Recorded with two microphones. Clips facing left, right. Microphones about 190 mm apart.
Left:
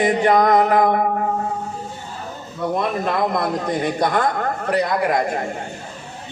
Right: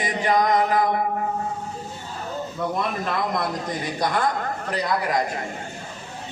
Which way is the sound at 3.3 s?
55° left (ahead or behind).